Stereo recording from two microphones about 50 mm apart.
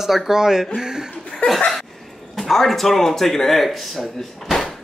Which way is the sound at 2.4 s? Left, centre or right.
Centre.